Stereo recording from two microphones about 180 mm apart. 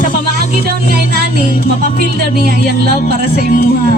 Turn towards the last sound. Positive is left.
turn(degrees=50)  # may be behind; listen again after turning